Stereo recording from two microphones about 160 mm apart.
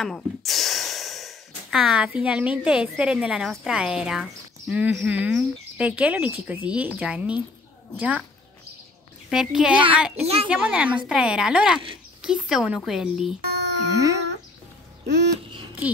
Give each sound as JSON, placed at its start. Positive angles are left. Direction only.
{"t": 0.0, "sound": "snort", "side_deg": 0}
{"t": 2.1, "sound": "a woman's voice", "side_deg": -5}
{"t": 9.3, "sound": "speech", "side_deg": -5}
{"t": 10.2, "sound": "a woman's voice", "side_deg": -40}
{"t": 10.5, "sound": "a woman's voice", "side_deg": -5}
{"t": 13.5, "sound": "a sound", "side_deg": -90}
{"t": 13.9, "sound": "a sound", "side_deg": -20}